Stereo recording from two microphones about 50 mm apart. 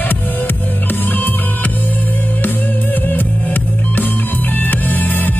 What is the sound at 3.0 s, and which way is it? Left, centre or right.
Music, left.